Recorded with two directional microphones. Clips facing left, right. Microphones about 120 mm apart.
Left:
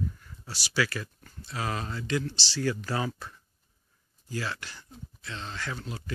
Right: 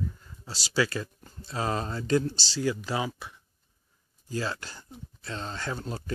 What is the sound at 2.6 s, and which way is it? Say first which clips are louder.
Speech: right 1 dB; 15° right (ahead or behind).